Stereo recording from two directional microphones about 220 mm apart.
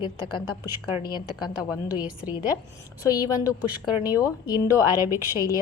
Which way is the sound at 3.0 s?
15° left (ahead or behind).